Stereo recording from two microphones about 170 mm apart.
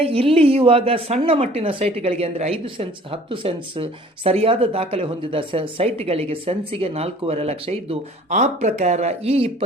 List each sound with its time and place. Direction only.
0.0 s speech: 35° right (ahead or behind)